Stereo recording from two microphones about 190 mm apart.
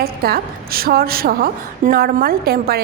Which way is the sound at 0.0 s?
55° right (ahead or behind).